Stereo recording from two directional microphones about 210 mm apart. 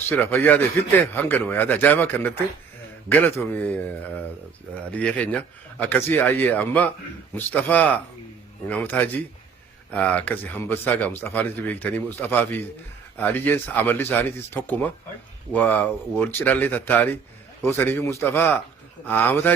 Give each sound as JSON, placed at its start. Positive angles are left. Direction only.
{"t": 0.1, "sound": "speech", "side_deg": 10}